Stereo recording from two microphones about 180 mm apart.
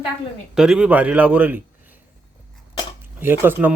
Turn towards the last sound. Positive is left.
turn(degrees=-10)  # may be behind; listen again after turning